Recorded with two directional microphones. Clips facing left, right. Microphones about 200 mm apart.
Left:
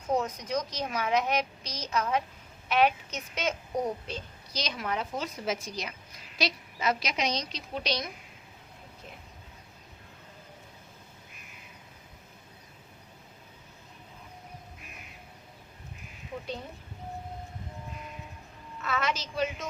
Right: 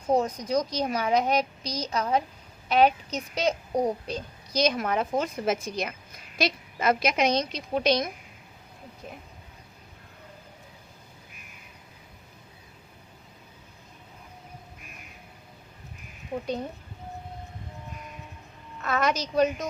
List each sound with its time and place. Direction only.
0.1 s a child's voice: 35° right (ahead or behind); by 8.1 s 50° right (ahead or behind)
18.8 s a child's voice: 45° right (ahead or behind)